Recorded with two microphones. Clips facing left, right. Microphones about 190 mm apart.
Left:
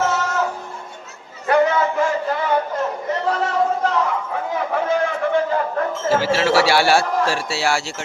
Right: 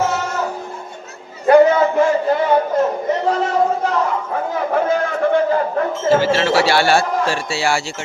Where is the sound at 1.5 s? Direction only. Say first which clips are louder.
Right 6 dB; 30° right (ahead or behind).